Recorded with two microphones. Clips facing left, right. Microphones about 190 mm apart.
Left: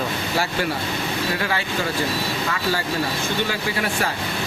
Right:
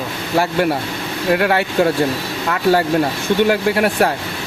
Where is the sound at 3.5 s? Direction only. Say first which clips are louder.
Right 9 dB; 60° right (ahead or behind).